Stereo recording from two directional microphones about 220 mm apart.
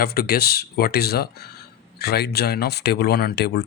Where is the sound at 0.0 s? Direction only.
45° left (ahead or behind).